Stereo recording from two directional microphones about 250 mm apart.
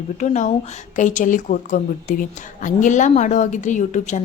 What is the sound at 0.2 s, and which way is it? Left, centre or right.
A woman's voice, left.